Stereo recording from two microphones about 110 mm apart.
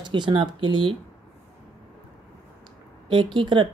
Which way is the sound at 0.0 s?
45° right (ahead or behind).